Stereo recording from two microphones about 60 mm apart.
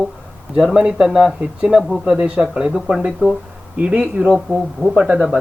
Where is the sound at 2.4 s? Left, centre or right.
Centre.